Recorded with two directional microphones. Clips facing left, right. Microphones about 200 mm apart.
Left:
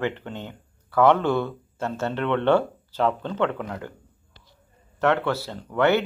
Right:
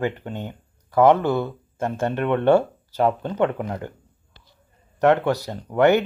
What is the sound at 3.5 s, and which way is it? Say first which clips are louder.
Speech: right 3 dB; 25° right (ahead or behind).